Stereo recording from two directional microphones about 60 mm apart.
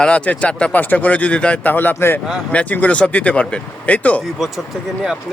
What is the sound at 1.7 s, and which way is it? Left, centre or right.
Speech, left.